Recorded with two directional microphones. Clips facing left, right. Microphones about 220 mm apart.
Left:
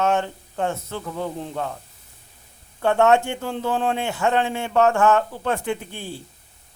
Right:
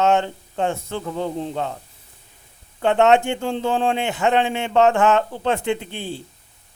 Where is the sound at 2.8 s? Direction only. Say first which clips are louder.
Right 2 dB; 20° right (ahead or behind).